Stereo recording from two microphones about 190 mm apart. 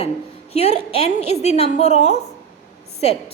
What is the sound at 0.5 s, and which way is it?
A woman's voice, 35° left (ahead or behind).